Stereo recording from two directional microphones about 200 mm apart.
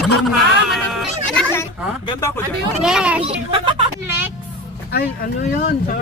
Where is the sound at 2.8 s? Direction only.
5° right (ahead or behind).